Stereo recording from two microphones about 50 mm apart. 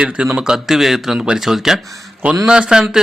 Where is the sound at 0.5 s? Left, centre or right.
Centre.